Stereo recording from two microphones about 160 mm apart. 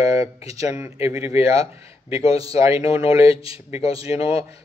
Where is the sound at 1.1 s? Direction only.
40° left (ahead or behind).